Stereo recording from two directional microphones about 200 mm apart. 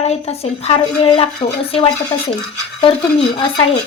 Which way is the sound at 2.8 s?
25° left (ahead or behind).